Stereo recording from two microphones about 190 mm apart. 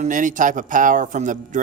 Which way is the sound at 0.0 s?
45° right (ahead or behind).